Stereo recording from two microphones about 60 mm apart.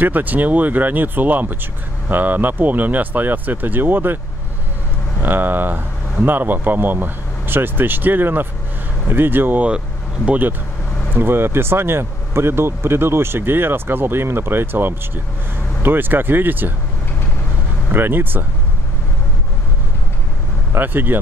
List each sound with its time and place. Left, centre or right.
0.0 s speech: right
5.2 s speech: right
9.7 s speech: centre
11.1 s speech: right
17.9 s speech: right
20.7 s speech: right